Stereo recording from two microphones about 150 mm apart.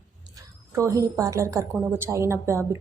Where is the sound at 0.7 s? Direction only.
20° right (ahead or behind).